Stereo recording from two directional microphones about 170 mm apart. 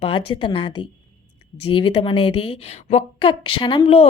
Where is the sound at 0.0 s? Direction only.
30° left (ahead or behind).